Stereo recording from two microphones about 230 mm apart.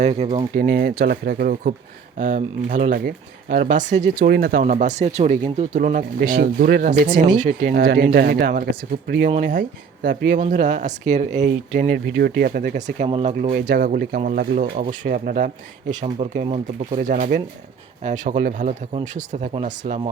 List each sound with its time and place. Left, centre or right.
0.0 s speech: right
4.7 s speech: right
13.5 s speech: right